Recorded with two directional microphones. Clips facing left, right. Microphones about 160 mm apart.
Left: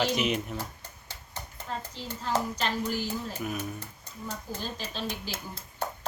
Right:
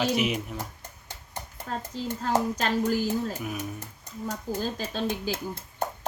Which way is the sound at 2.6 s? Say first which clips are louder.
Right 5 dB; 45° right (ahead or behind).